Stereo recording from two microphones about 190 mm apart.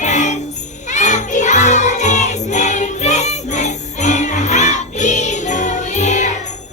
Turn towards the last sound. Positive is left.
turn(degrees=40)  # may be behind; listen again after turning